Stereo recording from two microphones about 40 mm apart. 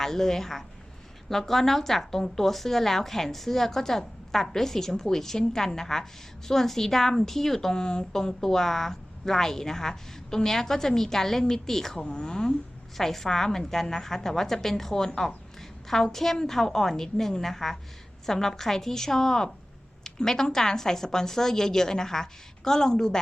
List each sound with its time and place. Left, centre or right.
0.0 s a woman's voice: centre
11.9 s a woman's voice: left